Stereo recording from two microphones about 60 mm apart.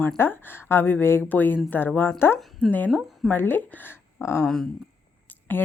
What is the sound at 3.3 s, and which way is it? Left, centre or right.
Speech, left.